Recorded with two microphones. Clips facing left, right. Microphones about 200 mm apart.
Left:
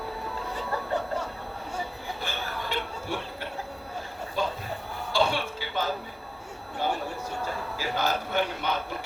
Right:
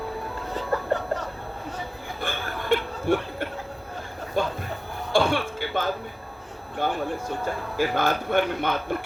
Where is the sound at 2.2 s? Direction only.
50° right (ahead or behind).